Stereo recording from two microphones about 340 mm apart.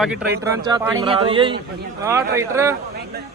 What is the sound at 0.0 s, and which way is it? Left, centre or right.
Speech, centre.